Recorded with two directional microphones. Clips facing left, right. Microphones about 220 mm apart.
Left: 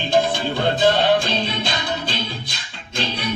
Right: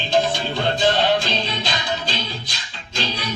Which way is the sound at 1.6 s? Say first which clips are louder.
Left 1 dB; 55° left (ahead or behind).